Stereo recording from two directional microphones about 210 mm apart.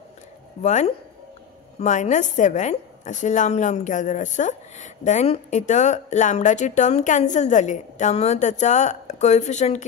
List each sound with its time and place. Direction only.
0.6 s a woman's voice: 35° left (ahead or behind)